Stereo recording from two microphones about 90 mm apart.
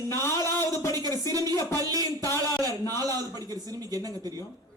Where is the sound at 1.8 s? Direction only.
40° right (ahead or behind).